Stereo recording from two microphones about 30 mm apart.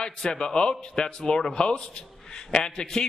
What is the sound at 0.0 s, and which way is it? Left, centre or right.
A man's voice, left.